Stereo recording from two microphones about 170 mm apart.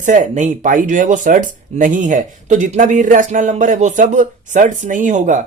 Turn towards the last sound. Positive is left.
turn(degrees=-45)  # may be behind; listen again after turning